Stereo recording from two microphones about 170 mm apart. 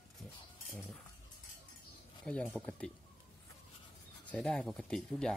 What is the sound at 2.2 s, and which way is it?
Speech, 5° left (ahead or behind).